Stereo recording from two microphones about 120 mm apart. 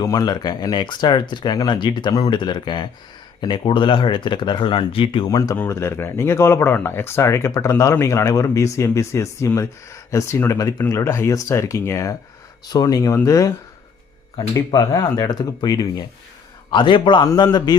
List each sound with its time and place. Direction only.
0.0 s speech: 30° left (ahead or behind); by 5.3 s 50° left (ahead or behind)
5.3 s speech: 30° left (ahead or behind)
14.5 s speech: 30° left (ahead or behind)